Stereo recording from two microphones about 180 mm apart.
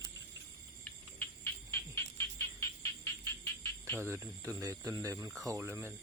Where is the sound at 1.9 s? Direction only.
15° left (ahead or behind).